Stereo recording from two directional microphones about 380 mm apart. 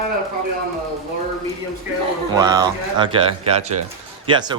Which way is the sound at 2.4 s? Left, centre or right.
Centre.